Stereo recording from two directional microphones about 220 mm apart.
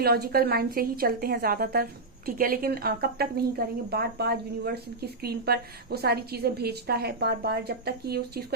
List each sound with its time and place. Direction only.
0.0 s a woman's voice: 45° right (ahead or behind)